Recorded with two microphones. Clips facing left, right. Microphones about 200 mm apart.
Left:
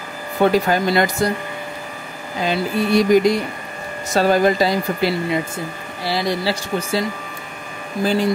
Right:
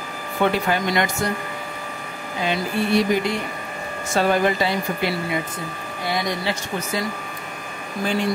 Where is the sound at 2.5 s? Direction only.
40° left (ahead or behind).